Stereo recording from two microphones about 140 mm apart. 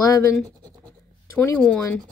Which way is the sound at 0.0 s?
25° left (ahead or behind).